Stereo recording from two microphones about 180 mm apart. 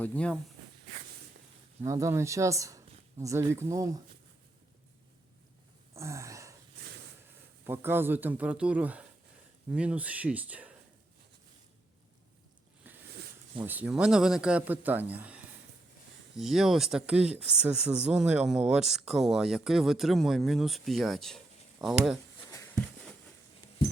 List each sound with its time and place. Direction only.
0.0 s speech: 5° left (ahead or behind)
1.8 s speech: 15° right (ahead or behind)
6.0 s a sound: 15° right (ahead or behind)
7.7 s speech: 10° right (ahead or behind)
13.7 s speech: 10° right (ahead or behind)
22.4 s a sound: 15° left (ahead or behind)